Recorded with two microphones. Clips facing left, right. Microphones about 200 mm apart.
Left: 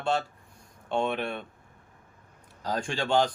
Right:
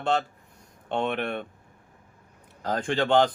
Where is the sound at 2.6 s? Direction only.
55° right (ahead or behind).